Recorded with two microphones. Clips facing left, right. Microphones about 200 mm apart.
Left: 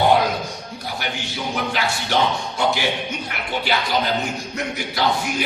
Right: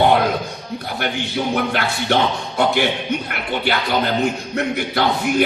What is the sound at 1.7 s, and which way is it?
Speech, 55° right (ahead or behind).